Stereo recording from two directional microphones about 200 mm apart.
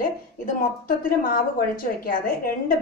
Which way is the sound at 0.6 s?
45° left (ahead or behind).